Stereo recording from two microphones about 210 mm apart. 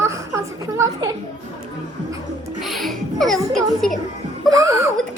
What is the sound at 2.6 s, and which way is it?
Music, centre (ahead or behind).